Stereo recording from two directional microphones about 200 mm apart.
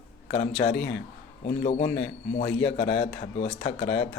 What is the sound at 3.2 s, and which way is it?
Speech, 30° left (ahead or behind).